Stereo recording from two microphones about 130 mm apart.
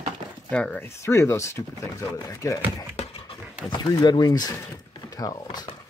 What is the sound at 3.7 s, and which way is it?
Speech, 35° left (ahead or behind).